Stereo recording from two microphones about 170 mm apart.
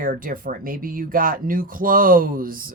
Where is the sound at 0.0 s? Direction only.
55° right (ahead or behind).